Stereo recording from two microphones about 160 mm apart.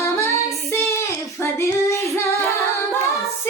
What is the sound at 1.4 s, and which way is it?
Child singing, 20° left (ahead or behind).